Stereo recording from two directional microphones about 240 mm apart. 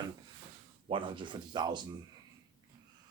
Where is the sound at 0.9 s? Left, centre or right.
Right.